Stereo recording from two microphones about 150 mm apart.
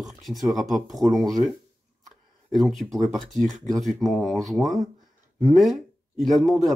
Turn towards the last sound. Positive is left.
turn(degrees=0)  # may be behind; listen again after turning